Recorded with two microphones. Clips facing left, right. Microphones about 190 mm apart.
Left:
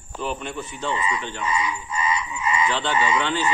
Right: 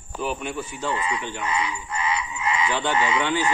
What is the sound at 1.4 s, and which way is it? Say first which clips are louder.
Croak: left 1 dB; 65° right (ahead or behind).